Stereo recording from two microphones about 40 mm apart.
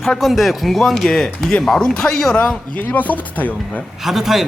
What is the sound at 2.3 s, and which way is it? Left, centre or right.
Speech, left.